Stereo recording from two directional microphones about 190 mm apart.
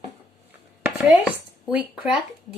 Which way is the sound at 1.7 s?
5° right (ahead or behind).